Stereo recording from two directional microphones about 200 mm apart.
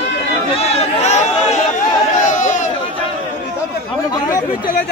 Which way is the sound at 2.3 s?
40° left (ahead or behind).